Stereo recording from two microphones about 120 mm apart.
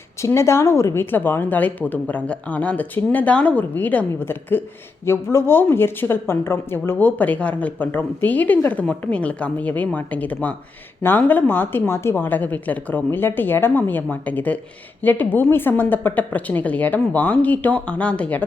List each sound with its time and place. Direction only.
0.2 s a woman's voice: 25° left (ahead or behind)